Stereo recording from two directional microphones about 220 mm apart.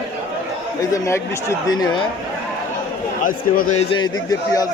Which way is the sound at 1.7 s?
15° left (ahead or behind).